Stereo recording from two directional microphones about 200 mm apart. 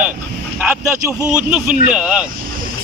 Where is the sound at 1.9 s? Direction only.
5° right (ahead or behind).